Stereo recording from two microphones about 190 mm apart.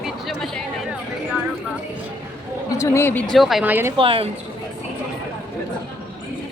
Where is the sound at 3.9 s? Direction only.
30° right (ahead or behind).